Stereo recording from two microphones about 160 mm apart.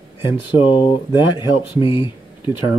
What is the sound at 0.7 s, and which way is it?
Speech, 30° left (ahead or behind).